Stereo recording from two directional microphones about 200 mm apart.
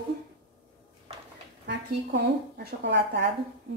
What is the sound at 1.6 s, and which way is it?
A woman's voice, 60° right (ahead or behind).